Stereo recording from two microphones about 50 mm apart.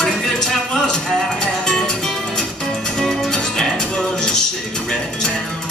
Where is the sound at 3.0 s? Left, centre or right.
Centre.